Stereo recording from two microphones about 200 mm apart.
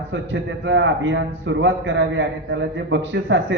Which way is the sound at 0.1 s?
65° right (ahead or behind).